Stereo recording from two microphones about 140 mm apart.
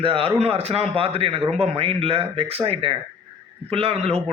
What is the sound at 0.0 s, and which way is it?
A man's voice, 40° right (ahead or behind).